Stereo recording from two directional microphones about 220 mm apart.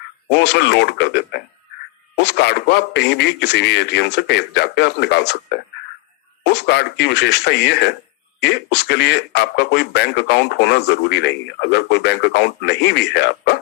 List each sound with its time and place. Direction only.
0.3 s speech: 50° left (ahead or behind)